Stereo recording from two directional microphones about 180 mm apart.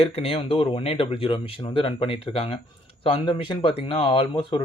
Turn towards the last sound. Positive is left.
turn(degrees=30)  # may be behind; listen again after turning